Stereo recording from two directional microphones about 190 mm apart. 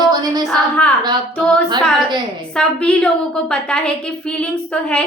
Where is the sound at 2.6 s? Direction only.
5° left (ahead or behind).